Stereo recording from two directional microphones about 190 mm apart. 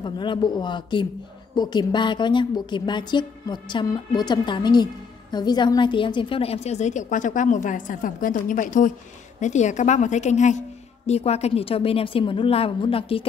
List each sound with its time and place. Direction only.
0.0 s a woman's voice: 25° left (ahead or behind)